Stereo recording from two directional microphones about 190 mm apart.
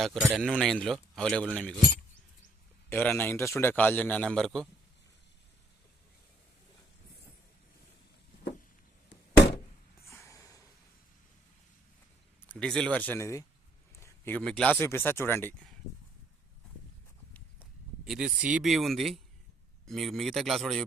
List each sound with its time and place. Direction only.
0.0 s a man's voice: centre (ahead or behind)
2.9 s a man's voice: 10° left (ahead or behind)
9.0 s a sound: 65° left (ahead or behind)
10.1 s a sound: 15° left (ahead or behind)
12.4 s a man's voice: 5° left (ahead or behind)
17.6 s a man's voice: 5° right (ahead or behind)